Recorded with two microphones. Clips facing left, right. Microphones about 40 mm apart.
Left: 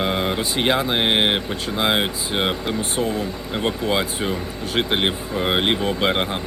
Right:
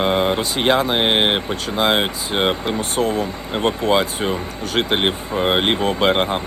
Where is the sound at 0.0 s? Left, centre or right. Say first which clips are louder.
Right 4 dB; centre.